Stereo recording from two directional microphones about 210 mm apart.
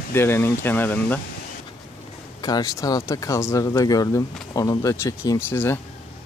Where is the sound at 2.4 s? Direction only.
20° left (ahead or behind).